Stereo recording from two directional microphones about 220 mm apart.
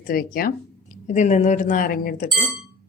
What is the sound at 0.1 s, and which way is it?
Speech, 40° left (ahead or behind).